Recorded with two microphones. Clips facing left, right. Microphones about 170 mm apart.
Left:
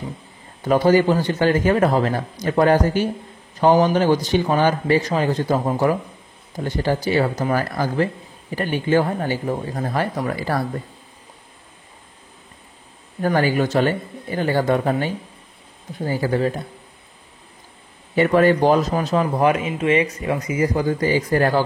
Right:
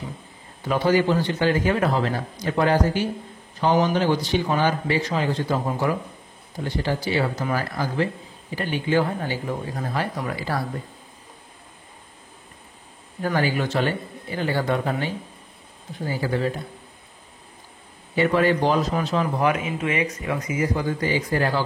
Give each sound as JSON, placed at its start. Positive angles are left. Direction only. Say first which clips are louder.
{"t": 0.7, "sound": "a man's voice", "louder": "left 5 dB", "side_deg": 45}
{"t": 13.2, "sound": "a man's voice", "louder": "left 5 dB", "side_deg": 45}
{"t": 16.2, "sound": "a man's voice", "louder": "left 4 dB", "side_deg": 45}
{"t": 18.1, "sound": "a man's voice", "louder": "left 4 dB", "side_deg": 50}
{"t": 19.4, "sound": "speech", "louder": "left 4 dB", "side_deg": 25}
{"t": 20.7, "sound": "a man's voice", "louder": "left 4 dB", "side_deg": 40}